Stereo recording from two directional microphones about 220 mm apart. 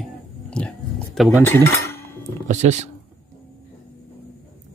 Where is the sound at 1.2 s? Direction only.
Centre (ahead or behind).